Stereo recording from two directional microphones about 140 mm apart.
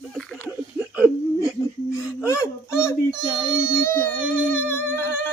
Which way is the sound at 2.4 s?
5° right (ahead or behind).